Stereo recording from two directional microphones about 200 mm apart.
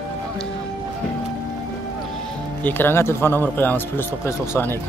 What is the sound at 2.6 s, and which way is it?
Speech, 10° left (ahead or behind).